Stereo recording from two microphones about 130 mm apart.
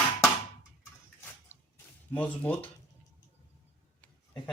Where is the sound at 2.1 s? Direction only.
10° left (ahead or behind).